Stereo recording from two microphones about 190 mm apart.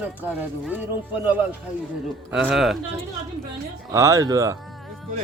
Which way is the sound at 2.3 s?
5° right (ahead or behind).